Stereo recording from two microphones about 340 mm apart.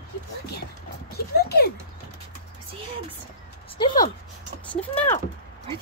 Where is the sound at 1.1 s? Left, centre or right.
Left.